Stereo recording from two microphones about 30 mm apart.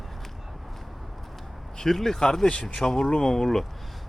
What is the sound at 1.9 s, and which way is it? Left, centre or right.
Speech, centre.